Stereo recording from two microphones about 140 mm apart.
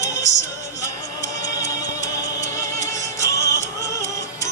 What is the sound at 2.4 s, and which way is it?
Music, 20° left (ahead or behind).